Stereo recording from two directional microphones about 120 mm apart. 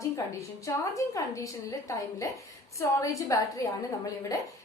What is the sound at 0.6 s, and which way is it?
A woman's voice, 25° left (ahead or behind).